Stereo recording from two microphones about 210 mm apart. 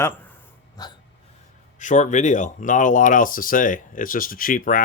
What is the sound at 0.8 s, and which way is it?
Hiccup, 20° left (ahead or behind).